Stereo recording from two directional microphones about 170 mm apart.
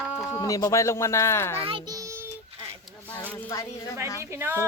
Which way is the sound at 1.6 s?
30° right (ahead or behind).